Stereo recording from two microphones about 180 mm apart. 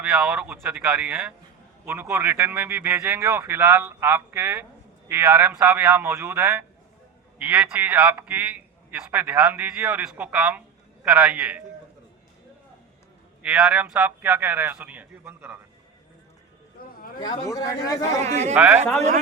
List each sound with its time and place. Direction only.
0.0 s a man's voice: 5° right (ahead or behind)
13.4 s a man's voice: 5° right (ahead or behind)
16.7 s a sound: 55° left (ahead or behind)
17.2 s speech: 20° left (ahead or behind)
18.3 s speech: 40° right (ahead or behind)
18.5 s a man's voice: 5° right (ahead or behind)